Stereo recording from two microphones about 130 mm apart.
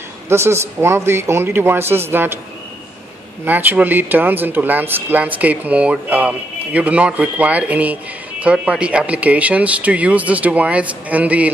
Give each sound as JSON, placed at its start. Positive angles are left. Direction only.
{"t": 0.3, "sound": "a man's voice", "side_deg": -20}
{"t": 3.4, "sound": "a man's voice", "side_deg": -15}